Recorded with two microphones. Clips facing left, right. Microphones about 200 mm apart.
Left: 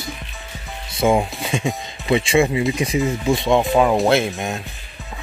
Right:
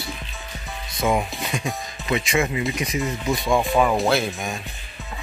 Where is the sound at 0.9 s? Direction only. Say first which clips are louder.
Left 5 dB; 30° left (ahead or behind).